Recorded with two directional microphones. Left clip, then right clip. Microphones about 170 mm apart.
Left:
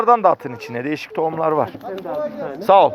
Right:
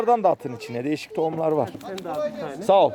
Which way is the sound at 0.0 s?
20° right (ahead or behind).